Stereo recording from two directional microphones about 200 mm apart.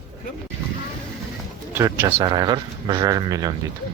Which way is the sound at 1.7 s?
10° right (ahead or behind).